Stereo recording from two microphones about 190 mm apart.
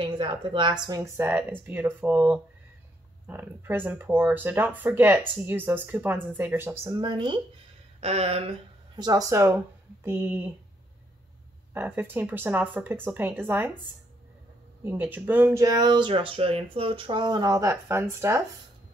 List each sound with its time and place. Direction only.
0.0 s a woman's voice: 25° right (ahead or behind); by 10.5 s 10° right (ahead or behind)
11.7 s speech: 10° right (ahead or behind)
14.8 s speech: 10° right (ahead or behind)